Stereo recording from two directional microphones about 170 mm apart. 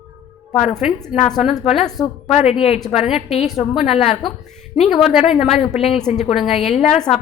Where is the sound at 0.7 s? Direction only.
Centre (ahead or behind).